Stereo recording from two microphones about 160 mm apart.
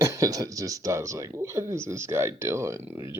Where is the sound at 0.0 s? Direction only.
20° right (ahead or behind).